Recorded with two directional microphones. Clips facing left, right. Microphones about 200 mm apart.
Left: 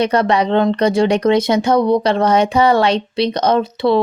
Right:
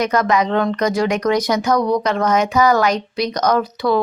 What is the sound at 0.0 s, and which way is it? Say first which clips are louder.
Speech: left 2 dB; 30° left (ahead or behind).